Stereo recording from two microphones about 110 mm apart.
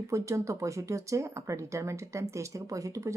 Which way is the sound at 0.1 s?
30° right (ahead or behind).